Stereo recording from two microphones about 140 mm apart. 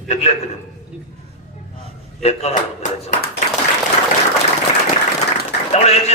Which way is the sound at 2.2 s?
50° left (ahead or behind).